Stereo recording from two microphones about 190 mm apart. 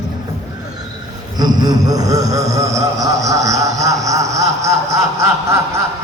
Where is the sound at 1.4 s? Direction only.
20° right (ahead or behind).